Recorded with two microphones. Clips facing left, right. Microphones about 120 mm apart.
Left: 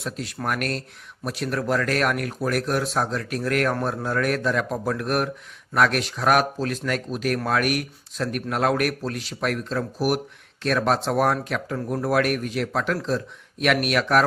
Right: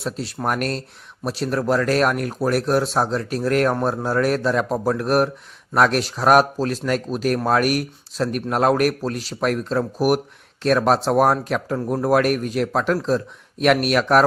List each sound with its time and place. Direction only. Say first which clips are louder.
0.0 s speech: right 4 dB; 30° right (ahead or behind)